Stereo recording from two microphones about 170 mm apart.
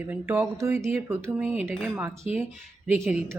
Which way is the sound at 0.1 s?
10° right (ahead or behind).